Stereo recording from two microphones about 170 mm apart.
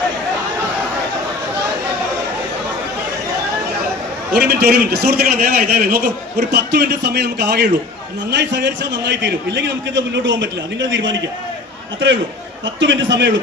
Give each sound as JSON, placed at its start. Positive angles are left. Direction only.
{"t": 4.4, "sound": "a man's voice", "side_deg": -70}
{"t": 12.6, "sound": "a man's voice", "side_deg": -90}